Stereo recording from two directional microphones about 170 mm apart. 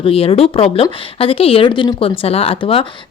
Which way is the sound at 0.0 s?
35° left (ahead or behind).